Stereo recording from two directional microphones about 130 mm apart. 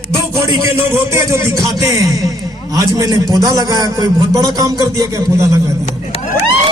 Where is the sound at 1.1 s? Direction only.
25° right (ahead or behind).